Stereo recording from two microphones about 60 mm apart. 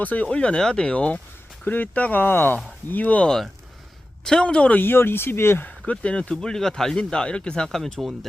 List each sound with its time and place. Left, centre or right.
0.0 s speech: left
3.2 s speech: centre
4.8 s speech: left
5.8 s speech: centre
7.9 s speech: centre